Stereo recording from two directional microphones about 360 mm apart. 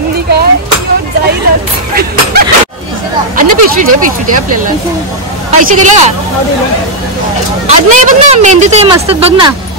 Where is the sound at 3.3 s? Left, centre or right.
Right.